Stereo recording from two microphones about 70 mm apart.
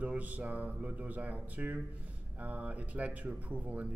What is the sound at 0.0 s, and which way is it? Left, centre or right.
Speech, right.